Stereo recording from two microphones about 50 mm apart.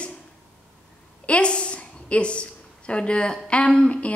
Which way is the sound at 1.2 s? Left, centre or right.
Left.